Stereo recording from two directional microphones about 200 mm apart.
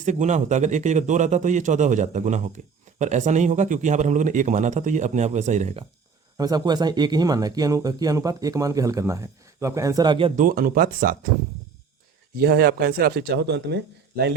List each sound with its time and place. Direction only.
0.0 s a man's voice: 35° right (ahead or behind)
6.3 s speech: 20° right (ahead or behind)
10.3 s speech: 45° right (ahead or behind)
12.4 s speech: 50° right (ahead or behind)